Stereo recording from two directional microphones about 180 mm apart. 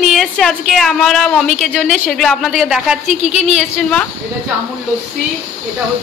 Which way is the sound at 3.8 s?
5° left (ahead or behind).